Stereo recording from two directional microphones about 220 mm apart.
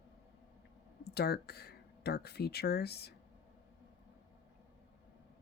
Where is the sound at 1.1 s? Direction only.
45° left (ahead or behind).